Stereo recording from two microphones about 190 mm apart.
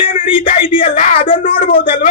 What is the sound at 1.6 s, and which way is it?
Speech, 45° left (ahead or behind).